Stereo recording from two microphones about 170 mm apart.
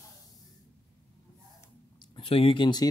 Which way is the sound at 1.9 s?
30° left (ahead or behind).